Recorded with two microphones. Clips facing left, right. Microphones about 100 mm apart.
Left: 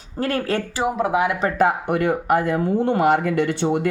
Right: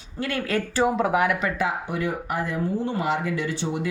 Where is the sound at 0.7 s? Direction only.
10° left (ahead or behind).